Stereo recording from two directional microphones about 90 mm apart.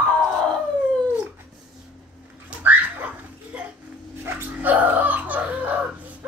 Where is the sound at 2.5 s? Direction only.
15° right (ahead or behind).